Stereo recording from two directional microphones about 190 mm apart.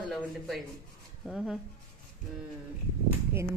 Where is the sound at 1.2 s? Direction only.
Centre (ahead or behind).